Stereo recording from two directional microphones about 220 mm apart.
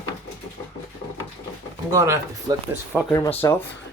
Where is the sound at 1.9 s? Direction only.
15° right (ahead or behind).